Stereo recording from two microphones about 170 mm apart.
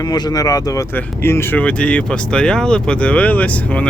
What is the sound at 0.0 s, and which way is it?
Speech, 20° left (ahead or behind).